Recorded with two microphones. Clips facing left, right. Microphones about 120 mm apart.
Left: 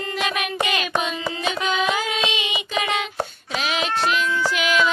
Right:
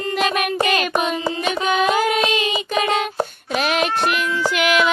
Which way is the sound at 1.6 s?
45° right (ahead or behind).